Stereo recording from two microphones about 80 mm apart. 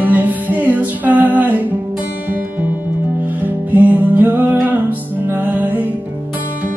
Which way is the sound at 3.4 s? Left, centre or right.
Right.